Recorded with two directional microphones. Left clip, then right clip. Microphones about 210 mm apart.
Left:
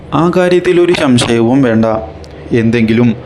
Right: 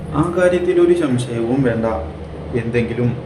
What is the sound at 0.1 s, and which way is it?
A man's voice, 45° left (ahead or behind).